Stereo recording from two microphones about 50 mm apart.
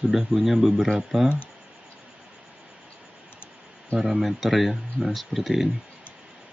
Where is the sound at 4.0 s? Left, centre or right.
Centre.